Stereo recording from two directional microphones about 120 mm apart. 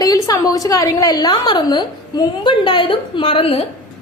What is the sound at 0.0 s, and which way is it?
A woman's voice, 30° left (ahead or behind).